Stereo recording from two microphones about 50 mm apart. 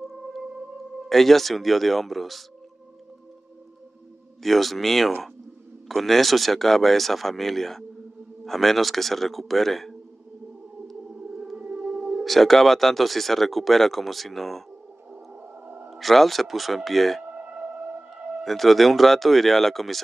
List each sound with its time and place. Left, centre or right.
1.0 s speech: centre
4.4 s speech: centre
11.1 s music: centre
11.5 s music: right
12.3 s speech: centre
15.6 s a sound: right
15.9 s speech: centre
17.2 s sonar: right
18.4 s speech: centre